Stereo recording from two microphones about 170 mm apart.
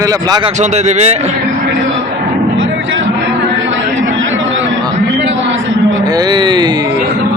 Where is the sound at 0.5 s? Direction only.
45° right (ahead or behind).